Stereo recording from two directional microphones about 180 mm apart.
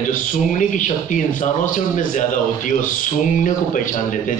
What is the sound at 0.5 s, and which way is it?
A man's voice, 45° left (ahead or behind).